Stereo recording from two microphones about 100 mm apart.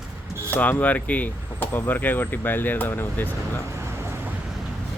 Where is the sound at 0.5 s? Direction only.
15° left (ahead or behind).